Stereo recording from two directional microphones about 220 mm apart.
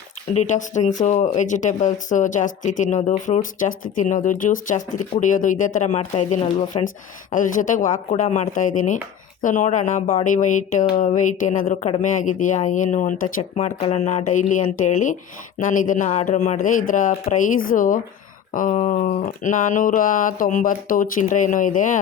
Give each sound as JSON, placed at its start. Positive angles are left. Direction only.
{"t": 0.3, "sound": "speech", "side_deg": 35}
{"t": 6.8, "sound": "speech", "side_deg": 35}
{"t": 13.4, "sound": "speech", "side_deg": 25}